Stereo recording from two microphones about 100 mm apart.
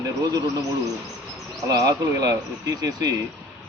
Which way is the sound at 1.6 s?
35° right (ahead or behind).